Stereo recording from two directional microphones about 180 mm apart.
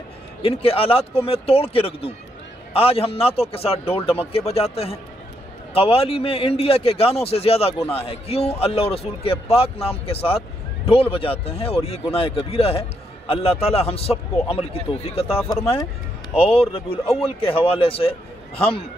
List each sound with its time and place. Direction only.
0.4 s a man's voice: 30° left (ahead or behind)